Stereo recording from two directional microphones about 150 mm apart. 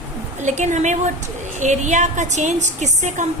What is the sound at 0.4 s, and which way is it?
A woman's voice, 50° right (ahead or behind).